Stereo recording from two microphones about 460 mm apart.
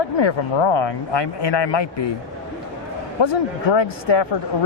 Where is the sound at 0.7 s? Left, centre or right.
Left.